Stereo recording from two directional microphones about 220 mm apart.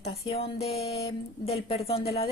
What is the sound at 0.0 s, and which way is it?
Speech, 25° left (ahead or behind).